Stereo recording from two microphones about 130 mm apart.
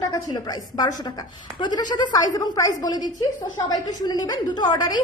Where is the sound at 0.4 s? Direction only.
30° left (ahead or behind).